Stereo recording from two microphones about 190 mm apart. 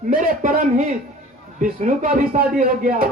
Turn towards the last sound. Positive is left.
turn(degrees=-45)  # may be behind; listen again after turning